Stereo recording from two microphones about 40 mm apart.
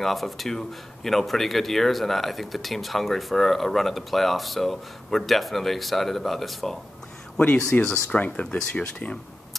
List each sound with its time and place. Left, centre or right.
0.0 s a man's voice: centre
7.8 s speech: centre
8.2 s speech: left